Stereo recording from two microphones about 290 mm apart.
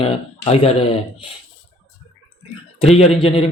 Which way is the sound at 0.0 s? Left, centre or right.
Left.